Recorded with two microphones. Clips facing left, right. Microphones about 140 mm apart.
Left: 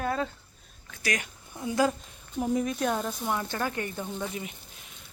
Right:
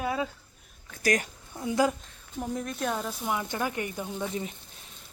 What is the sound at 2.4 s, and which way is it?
Speech, 5° left (ahead or behind).